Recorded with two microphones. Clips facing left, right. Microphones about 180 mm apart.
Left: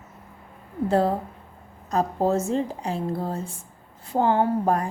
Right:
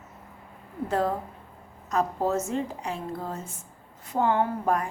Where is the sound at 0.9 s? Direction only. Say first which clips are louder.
Left 4 dB; 30° left (ahead or behind).